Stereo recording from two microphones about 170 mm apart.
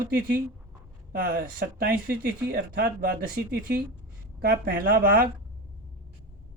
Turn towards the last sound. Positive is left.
turn(degrees=-55)  # may be behind; listen again after turning